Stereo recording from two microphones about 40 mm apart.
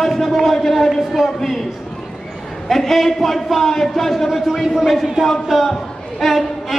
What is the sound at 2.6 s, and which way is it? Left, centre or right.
A man's voice, centre.